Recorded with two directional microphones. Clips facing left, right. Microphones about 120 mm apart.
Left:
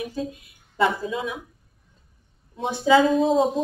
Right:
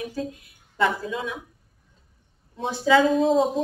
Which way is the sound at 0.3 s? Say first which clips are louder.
Left 1 dB; 20° left (ahead or behind).